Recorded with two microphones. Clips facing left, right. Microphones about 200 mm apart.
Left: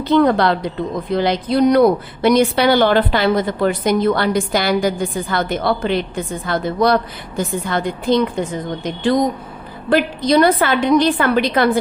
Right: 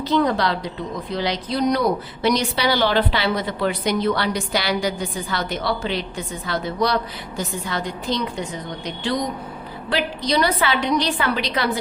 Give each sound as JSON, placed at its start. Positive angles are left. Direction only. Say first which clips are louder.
{"t": 0.0, "sound": "a woman's voice", "louder": "left 6 dB", "side_deg": 55}